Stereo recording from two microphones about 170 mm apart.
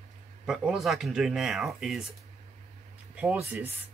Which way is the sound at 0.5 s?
Centre (ahead or behind).